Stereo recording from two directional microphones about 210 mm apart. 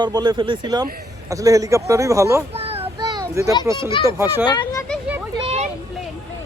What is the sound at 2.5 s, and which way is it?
Child singing, 30° right (ahead or behind).